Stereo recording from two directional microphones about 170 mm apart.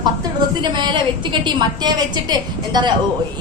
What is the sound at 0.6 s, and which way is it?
A woman's voice, 25° right (ahead or behind).